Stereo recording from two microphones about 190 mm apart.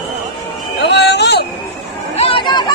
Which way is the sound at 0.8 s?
60° left (ahead or behind).